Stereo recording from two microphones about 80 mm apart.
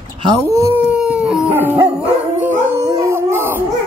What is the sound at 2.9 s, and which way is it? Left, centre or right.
Howl, right.